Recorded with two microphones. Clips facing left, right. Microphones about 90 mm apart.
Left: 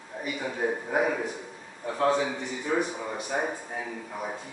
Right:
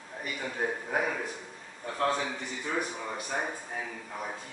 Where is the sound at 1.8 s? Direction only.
10° left (ahead or behind).